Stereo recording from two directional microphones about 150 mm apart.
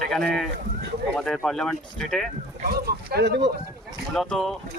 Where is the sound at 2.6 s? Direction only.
90° right.